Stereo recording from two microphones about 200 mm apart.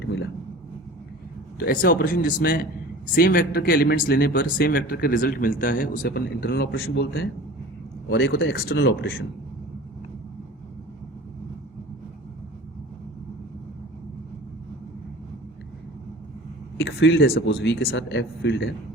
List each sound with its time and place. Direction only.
0.0 s vehicle: 65° left (ahead or behind)
1.5 s speech: 50° left (ahead or behind)
8.1 s speech: 65° left (ahead or behind)
8.5 s speech: 60° left (ahead or behind)
16.8 s speech: 65° left (ahead or behind)
17.5 s speech: 65° left (ahead or behind)